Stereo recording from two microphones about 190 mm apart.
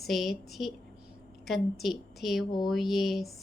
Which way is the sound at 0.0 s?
Centre (ahead or behind).